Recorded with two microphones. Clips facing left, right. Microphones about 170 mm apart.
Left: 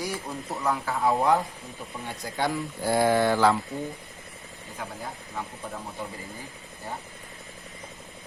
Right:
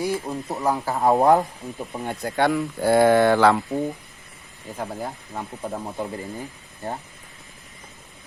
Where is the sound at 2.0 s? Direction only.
60° right (ahead or behind).